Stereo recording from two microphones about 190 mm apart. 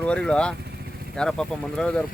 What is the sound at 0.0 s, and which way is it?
Speech, 5° left (ahead or behind).